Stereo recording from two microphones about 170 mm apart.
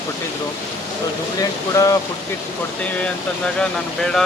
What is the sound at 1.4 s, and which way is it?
Speech, 20° left (ahead or behind).